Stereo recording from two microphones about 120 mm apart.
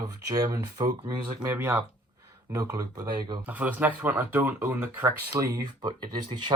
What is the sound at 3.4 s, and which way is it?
Speech, 15° right (ahead or behind).